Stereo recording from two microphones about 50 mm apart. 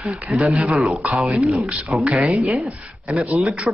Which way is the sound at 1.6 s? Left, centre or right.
Right.